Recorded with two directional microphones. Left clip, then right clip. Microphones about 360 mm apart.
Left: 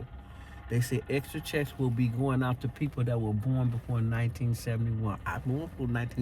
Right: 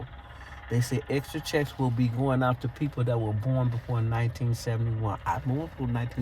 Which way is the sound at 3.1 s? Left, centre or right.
Right.